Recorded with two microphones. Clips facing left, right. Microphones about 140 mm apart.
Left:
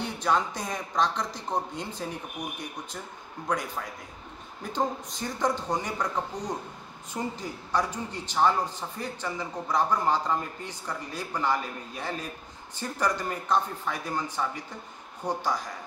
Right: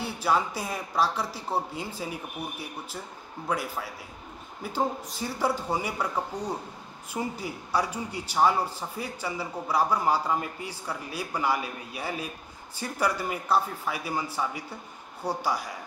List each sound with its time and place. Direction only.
0.0 s a man's voice: 5° right (ahead or behind)